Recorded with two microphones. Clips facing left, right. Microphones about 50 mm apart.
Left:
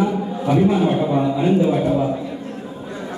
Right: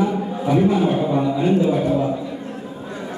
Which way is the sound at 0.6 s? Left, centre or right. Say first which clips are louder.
Left 1 dB; centre.